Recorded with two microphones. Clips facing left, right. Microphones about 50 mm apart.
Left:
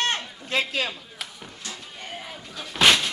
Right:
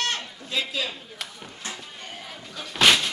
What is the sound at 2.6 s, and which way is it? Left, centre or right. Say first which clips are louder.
Slam: even; centre.